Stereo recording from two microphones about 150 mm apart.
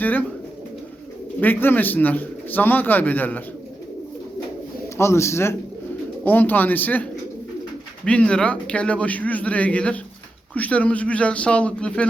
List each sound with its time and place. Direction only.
0.0 s speech: 10° left (ahead or behind)
1.4 s speech: 10° left (ahead or behind)
4.9 s speech: 20° left (ahead or behind)